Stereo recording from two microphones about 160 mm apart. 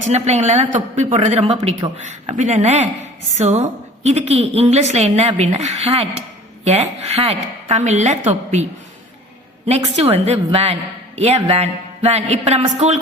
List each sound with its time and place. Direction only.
0.0 s a woman's voice: 45° right (ahead or behind)
9.6 s speech: 40° right (ahead or behind)